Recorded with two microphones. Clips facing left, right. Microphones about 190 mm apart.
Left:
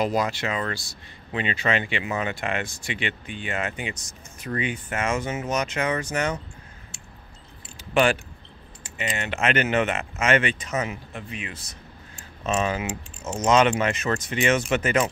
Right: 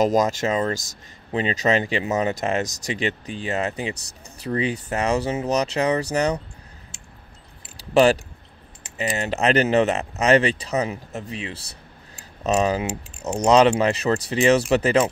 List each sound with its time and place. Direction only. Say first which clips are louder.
0.0 s speech: right 5 dB; 40° right (ahead or behind)
7.7 s keys jangling: right 5 dB; 35° right (ahead or behind)
8.9 s speech: right 5 dB; 35° right (ahead or behind)